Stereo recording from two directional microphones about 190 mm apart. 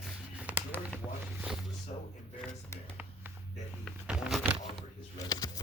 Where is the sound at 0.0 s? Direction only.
5° right (ahead or behind).